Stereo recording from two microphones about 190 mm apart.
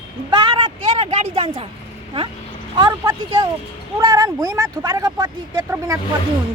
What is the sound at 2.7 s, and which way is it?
Speech, 25° right (ahead or behind).